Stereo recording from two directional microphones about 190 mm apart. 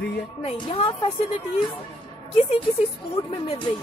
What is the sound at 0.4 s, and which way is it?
A woman's voice, 30° left (ahead or behind).